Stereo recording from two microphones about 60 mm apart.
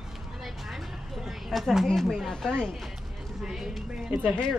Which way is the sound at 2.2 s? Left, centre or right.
Centre.